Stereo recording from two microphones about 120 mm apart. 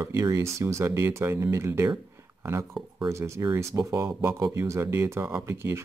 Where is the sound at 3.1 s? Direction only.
25° right (ahead or behind).